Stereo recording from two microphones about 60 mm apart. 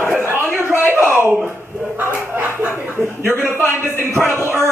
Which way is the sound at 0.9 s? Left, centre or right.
Right.